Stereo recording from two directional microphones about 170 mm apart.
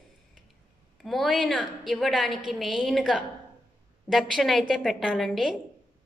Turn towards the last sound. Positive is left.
turn(degrees=0)  # may be behind; listen again after turning